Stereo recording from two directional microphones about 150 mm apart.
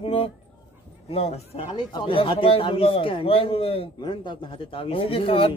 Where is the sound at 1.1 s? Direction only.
40° left (ahead or behind).